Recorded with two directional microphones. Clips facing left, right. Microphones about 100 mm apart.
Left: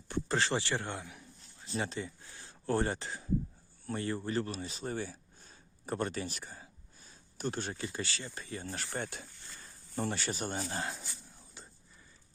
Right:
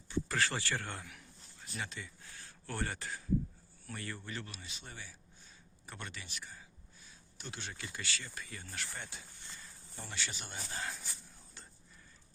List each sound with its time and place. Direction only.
0.3 s speech: 25° left (ahead or behind)
1.6 s a sound: 30° left (ahead or behind)
3.8 s speech: 30° left (ahead or behind)
9.0 s speech: 55° left (ahead or behind)
9.9 s speech: 45° left (ahead or behind)